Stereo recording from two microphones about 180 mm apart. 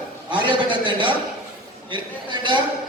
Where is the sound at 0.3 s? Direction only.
25° right (ahead or behind).